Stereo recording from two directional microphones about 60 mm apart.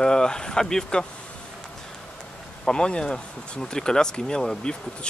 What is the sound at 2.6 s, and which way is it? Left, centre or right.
Speech, centre.